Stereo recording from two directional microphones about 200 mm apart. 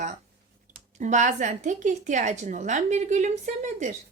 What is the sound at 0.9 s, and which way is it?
A woman's voice, 35° right (ahead or behind).